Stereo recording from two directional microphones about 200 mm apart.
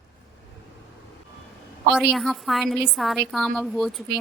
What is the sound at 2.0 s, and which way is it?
A woman's voice, centre (ahead or behind).